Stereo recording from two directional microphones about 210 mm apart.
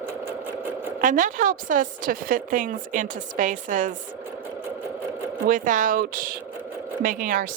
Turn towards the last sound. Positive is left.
turn(degrees=-40)  # may be behind; listen again after turning